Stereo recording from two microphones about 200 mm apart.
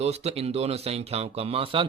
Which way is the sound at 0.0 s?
30° right (ahead or behind).